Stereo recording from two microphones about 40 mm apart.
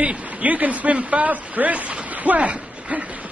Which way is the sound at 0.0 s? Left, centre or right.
Right.